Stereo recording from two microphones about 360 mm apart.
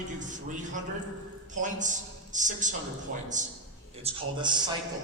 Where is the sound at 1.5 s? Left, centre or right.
Right.